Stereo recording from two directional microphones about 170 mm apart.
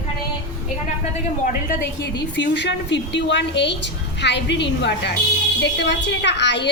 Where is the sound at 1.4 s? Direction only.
60° left (ahead or behind).